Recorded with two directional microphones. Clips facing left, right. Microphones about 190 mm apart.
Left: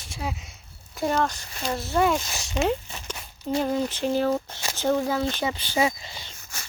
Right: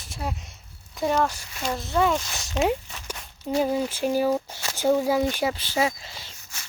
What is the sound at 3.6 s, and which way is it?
Speech, 10° right (ahead or behind).